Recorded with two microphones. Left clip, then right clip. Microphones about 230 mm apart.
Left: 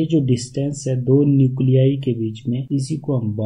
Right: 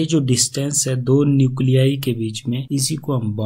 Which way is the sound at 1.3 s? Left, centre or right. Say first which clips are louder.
Even; centre.